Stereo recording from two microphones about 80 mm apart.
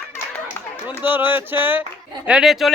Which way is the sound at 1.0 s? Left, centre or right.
Right.